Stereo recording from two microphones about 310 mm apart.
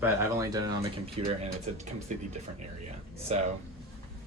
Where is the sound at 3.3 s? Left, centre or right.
Right.